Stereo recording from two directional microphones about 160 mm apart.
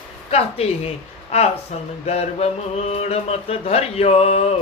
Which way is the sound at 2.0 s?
40° left (ahead or behind).